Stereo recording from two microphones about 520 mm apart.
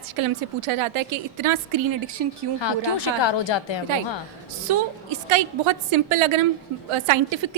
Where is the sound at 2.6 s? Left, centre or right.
Left.